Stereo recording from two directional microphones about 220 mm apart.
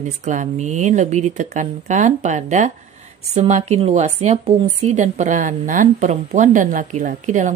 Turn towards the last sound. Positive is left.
turn(degrees=-35)  # may be behind; listen again after turning